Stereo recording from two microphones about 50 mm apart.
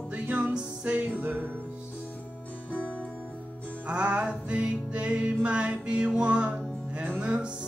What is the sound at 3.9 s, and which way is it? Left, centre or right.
Music, right.